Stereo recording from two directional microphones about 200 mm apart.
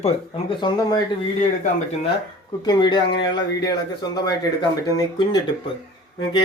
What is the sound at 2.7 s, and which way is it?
Speech, 20° left (ahead or behind).